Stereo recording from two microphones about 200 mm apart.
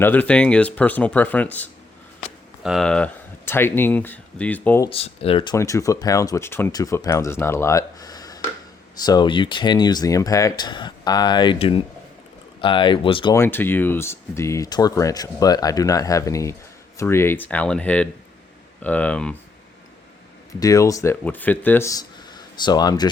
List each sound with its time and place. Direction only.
0.0 s speech: 10° left (ahead or behind)
4.9 s speech: 30° left (ahead or behind)
5.5 s speech: 15° left (ahead or behind)
13.3 s speech: 10° left (ahead or behind)
20.5 s speech: 15° left (ahead or behind)